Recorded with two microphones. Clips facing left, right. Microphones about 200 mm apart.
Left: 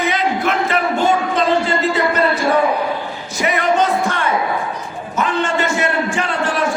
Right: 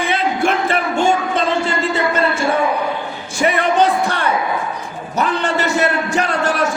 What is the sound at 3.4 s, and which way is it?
Music, 30° right (ahead or behind).